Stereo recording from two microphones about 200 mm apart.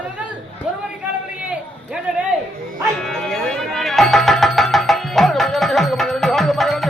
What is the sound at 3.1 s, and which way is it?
Music, centre (ahead or behind).